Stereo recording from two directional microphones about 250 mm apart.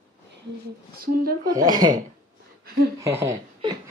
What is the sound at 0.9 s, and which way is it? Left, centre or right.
Speech, right.